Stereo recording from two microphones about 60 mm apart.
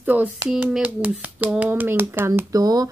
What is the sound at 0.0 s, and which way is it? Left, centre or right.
A woman's voice, right.